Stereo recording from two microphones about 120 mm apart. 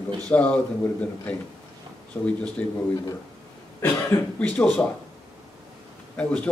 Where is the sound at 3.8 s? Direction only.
20° left (ahead or behind).